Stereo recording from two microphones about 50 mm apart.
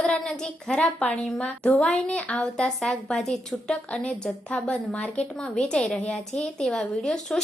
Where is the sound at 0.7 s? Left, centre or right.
Left; by 3.7 s centre.